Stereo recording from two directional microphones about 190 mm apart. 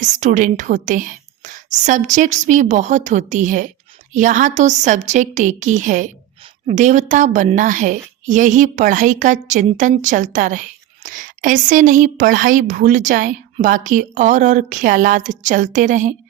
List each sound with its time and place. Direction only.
0.0 s a woman's voice: 40° right (ahead or behind)